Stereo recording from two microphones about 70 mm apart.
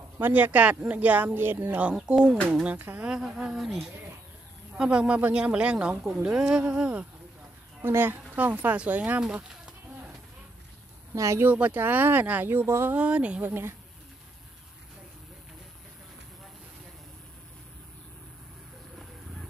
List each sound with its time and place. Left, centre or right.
0.2 s speech: right
2.0 s speech: centre
4.7 s speech: centre
7.8 s speech: right
9.3 s a sound: right
11.1 s speech: right
11.4 s speech: right
12.9 s speech: centre
13.5 s speech: right